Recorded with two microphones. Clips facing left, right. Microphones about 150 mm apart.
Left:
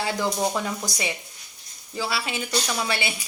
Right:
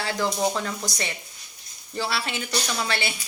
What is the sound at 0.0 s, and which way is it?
A woman's voice, 15° left (ahead or behind).